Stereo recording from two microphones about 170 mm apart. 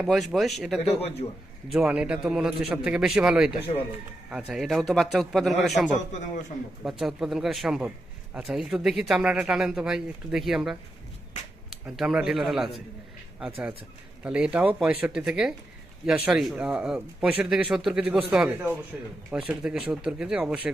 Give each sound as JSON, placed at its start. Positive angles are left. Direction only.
{"t": 0.0, "sound": "a man's voice", "side_deg": -5}
{"t": 6.1, "sound": "a man's voice", "side_deg": 45}
{"t": 6.8, "sound": "a man's voice", "side_deg": -5}
{"t": 14.3, "sound": "a man's voice", "side_deg": -5}